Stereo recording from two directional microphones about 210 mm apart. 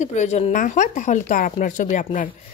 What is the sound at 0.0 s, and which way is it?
A woman's voice, 35° left (ahead or behind).